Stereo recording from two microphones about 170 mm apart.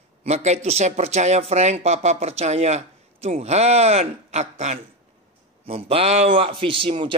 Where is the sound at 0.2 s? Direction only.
40° right (ahead or behind).